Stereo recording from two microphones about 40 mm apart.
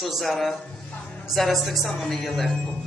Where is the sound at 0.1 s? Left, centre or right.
Centre.